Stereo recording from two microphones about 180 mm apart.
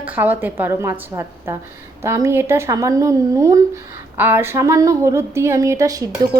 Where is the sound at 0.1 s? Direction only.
10° right (ahead or behind).